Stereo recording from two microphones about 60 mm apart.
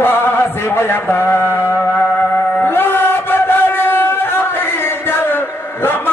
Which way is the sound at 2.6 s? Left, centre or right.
Left.